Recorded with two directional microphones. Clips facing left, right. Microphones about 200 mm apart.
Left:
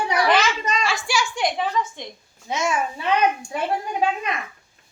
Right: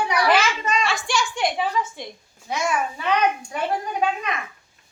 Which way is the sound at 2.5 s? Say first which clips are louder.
Left 1 dB; 20° left (ahead or behind).